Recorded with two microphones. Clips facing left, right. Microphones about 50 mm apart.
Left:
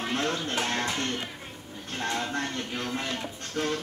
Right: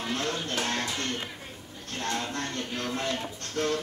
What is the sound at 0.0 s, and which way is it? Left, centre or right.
Music, left.